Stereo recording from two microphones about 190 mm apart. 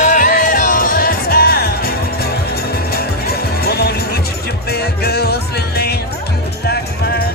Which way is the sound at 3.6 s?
55° left (ahead or behind).